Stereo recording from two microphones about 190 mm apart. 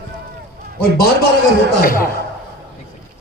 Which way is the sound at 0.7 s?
55° left (ahead or behind).